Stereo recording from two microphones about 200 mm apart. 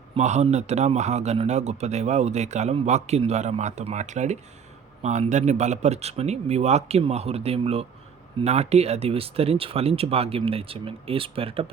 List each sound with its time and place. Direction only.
0.2 s a man's voice: 35° right (ahead or behind)